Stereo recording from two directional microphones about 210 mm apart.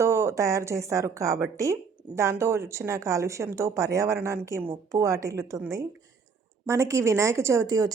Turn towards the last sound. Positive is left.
turn(degrees=-15)  # may be behind; listen again after turning